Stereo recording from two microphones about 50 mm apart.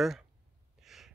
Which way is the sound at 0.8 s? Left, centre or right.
Centre.